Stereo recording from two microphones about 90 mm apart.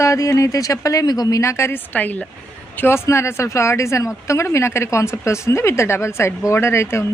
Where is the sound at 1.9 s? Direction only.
15° left (ahead or behind).